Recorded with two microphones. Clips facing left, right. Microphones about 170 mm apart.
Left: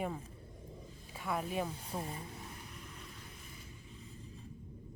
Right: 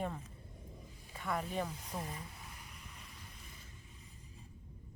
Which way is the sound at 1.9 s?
30° left (ahead or behind).